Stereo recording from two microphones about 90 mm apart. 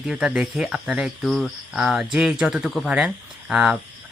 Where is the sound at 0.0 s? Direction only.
10° right (ahead or behind).